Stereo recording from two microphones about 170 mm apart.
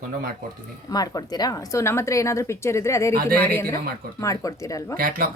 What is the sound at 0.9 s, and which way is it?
Speech, 20° left (ahead or behind).